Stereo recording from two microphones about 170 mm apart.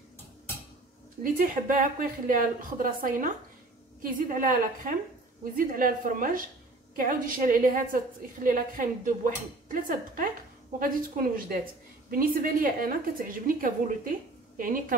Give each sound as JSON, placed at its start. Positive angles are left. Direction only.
{"t": 1.2, "sound": "a woman's voice", "side_deg": -55}